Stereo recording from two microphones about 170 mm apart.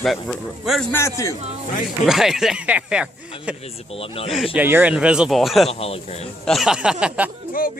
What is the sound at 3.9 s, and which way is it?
Speech, 35° left (ahead or behind).